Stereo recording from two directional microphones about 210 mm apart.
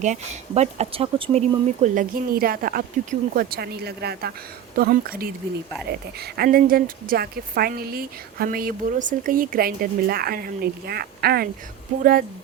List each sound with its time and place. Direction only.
0.0 s speech: 35° right (ahead or behind)